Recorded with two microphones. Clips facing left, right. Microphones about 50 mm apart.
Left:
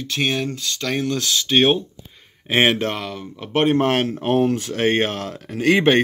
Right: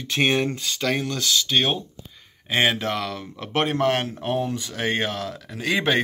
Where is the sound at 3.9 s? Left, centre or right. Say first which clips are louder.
Left 5 dB; left.